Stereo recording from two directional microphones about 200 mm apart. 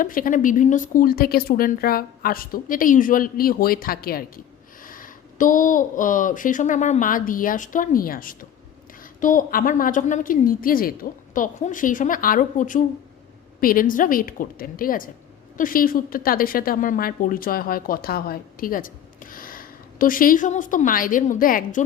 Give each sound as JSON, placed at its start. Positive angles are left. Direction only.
{"t": 0.0, "sound": "a woman's voice", "side_deg": 45}